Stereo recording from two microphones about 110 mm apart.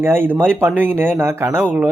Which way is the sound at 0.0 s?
20° right (ahead or behind).